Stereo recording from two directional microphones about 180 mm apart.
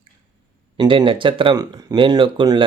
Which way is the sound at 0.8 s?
30° right (ahead or behind).